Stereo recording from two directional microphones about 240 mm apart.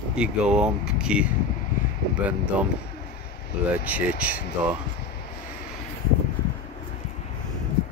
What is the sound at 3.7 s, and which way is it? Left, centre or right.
Speech, centre.